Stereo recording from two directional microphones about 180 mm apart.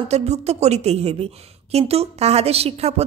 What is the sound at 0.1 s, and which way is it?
A woman's voice, 35° right (ahead or behind).